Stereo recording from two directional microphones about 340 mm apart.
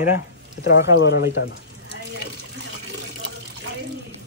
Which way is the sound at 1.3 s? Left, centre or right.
Left.